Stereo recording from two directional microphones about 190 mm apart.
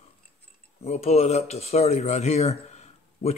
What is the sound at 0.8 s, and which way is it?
Speech, 35° left (ahead or behind).